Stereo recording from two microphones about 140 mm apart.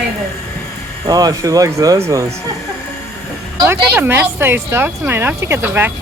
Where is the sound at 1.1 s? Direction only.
25° right (ahead or behind).